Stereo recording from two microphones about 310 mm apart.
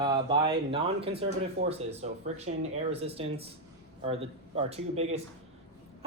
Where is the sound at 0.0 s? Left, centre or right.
Centre.